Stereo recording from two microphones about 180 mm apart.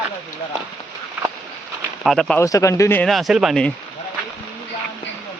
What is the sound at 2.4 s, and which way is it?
Speech, 15° left (ahead or behind).